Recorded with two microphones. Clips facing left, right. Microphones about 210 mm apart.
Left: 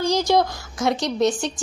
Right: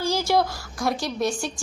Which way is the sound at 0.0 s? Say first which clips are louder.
Left 3 dB; 15° left (ahead or behind).